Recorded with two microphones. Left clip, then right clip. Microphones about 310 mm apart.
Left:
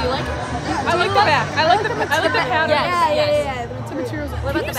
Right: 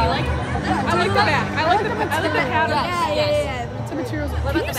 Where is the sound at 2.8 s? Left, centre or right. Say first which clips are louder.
Left 3 dB; centre.